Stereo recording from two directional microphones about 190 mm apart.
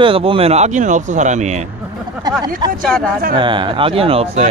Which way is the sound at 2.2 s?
20° right (ahead or behind).